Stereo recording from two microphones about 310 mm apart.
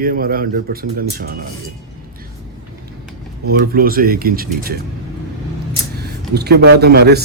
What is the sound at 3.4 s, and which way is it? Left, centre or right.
Speech, right.